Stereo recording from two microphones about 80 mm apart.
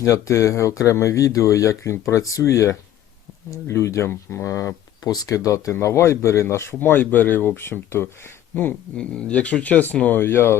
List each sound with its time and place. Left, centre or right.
0.0 s speech: left
9.0 s speech: centre; by 10.6 s left